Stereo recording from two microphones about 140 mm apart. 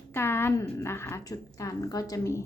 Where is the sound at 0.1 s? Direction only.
15° left (ahead or behind).